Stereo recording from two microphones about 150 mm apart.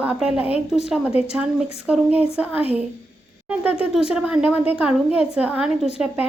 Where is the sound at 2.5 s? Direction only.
40° left (ahead or behind).